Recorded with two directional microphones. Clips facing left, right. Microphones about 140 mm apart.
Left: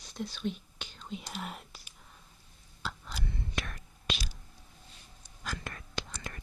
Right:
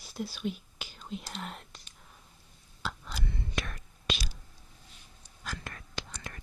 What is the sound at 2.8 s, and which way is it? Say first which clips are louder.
Whispering: right 2 dB; 90° right.